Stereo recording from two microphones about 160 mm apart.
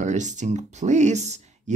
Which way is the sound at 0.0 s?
50° right (ahead or behind).